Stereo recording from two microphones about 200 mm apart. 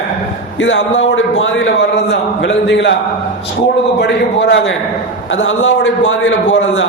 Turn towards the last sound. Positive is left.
turn(degrees=70)  # may be behind; listen again after turning